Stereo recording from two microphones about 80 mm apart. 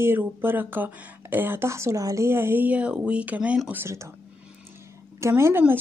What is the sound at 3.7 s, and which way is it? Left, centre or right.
Speech, right.